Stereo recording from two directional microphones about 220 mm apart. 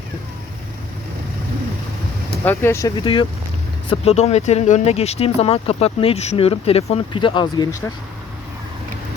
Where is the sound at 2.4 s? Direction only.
10° left (ahead or behind).